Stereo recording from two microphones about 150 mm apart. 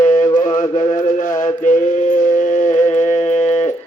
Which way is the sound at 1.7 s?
60° left (ahead or behind).